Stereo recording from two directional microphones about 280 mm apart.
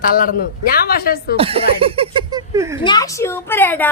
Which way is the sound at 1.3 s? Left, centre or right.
Centre.